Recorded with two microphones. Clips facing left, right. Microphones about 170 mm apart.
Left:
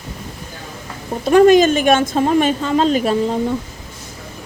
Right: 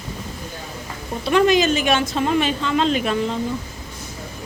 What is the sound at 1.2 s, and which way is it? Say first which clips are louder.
A woman's voice: left 7 dB; 45° left (ahead or behind).